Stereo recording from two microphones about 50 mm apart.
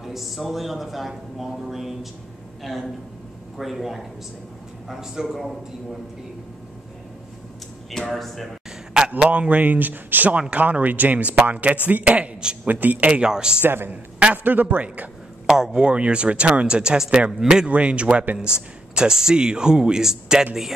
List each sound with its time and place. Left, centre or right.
0.0 s speech: centre
7.9 s speech: centre
9.2 s speech: right
12.6 s speech: right
13.1 s speech: centre
14.2 s speech: right
15.4 s speech: centre
17.6 s speech: right; by 20.4 s centre